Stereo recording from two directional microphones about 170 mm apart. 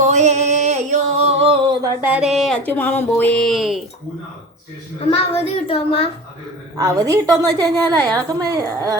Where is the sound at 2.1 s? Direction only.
Centre (ahead or behind).